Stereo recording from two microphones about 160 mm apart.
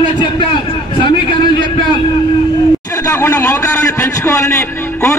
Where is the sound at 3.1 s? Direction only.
15° left (ahead or behind).